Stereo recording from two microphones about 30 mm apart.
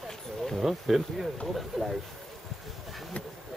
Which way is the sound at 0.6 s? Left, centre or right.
Centre.